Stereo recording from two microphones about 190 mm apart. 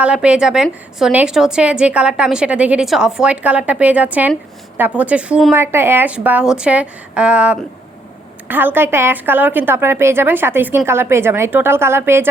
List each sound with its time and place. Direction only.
0.0 s a woman's voice: 5° right (ahead or behind)